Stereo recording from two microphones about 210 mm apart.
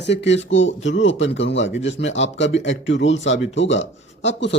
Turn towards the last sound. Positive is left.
turn(degrees=60)  # may be behind; listen again after turning